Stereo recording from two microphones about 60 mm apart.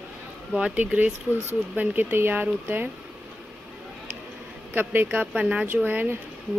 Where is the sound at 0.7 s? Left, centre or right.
Right.